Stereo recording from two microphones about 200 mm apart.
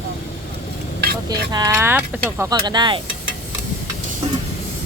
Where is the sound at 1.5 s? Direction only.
15° right (ahead or behind).